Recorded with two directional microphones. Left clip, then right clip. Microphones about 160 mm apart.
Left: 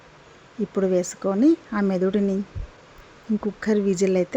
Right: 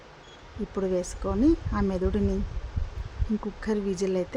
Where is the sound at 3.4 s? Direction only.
25° left (ahead or behind).